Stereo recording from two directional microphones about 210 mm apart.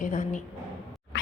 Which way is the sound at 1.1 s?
55° left (ahead or behind).